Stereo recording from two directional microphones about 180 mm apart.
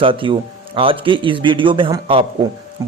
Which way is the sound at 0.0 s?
30° right (ahead or behind).